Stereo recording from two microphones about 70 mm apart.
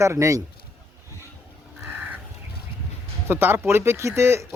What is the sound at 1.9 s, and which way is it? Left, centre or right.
Crow, right.